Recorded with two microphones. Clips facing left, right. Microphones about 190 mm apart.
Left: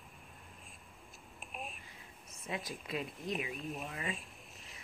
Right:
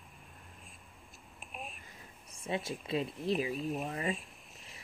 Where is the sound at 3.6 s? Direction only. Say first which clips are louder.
Right 6 dB; centre (ahead or behind).